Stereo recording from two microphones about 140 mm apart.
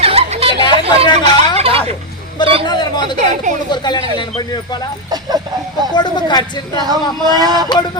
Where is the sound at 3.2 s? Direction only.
60° right (ahead or behind).